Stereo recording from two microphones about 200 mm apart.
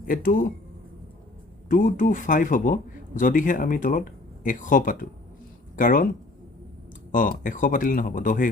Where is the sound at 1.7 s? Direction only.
40° left (ahead or behind).